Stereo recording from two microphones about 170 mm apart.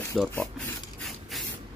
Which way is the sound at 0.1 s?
5° left (ahead or behind).